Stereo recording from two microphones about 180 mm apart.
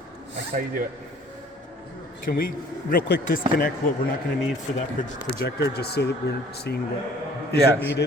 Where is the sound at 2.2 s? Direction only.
55° left (ahead or behind).